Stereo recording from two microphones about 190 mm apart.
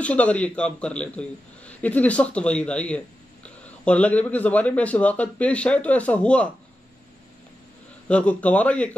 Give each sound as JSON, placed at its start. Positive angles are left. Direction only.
{"t": 0.0, "sound": "a man's voice", "side_deg": 5}
{"t": 8.1, "sound": "a man's voice", "side_deg": 5}